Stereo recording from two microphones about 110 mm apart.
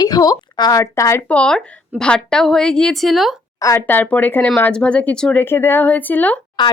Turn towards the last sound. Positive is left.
turn(degrees=45)  # may be behind; listen again after turning